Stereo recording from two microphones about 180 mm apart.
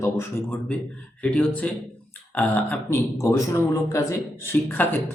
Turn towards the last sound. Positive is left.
turn(degrees=10)  # may be behind; listen again after turning